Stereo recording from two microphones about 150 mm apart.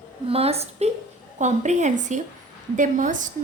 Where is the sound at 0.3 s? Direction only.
40° right (ahead or behind).